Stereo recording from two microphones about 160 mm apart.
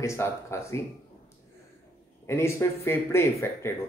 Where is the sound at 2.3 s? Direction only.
15° left (ahead or behind).